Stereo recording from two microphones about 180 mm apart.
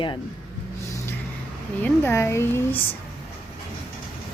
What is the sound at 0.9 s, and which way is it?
Vehicle, 15° left (ahead or behind).